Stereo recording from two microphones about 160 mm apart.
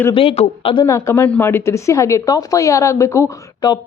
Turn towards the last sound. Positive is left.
turn(degrees=20)  # may be behind; listen again after turning